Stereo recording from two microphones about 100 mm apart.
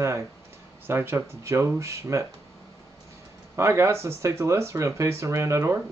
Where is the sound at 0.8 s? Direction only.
25° right (ahead or behind).